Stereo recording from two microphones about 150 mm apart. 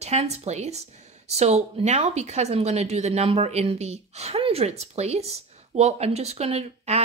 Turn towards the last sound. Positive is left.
turn(degrees=-45)  # may be behind; listen again after turning